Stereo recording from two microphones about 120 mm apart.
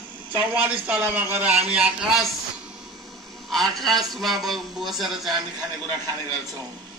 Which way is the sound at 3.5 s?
Centre (ahead or behind).